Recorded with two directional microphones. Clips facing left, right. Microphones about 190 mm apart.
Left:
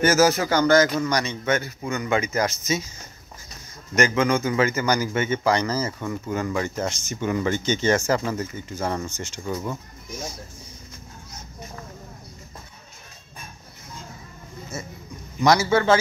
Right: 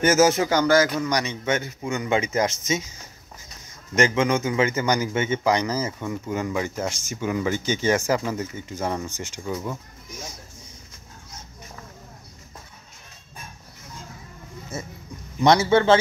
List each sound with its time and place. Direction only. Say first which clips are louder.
0.0 s a man's voice: right 1 dB; 20° right (ahead or behind)
3.9 s a man's voice: even; 25° right (ahead or behind)
9.5 s speech: left 1 dB; centre (ahead or behind)
15.4 s speech: right 1 dB; 30° right (ahead or behind)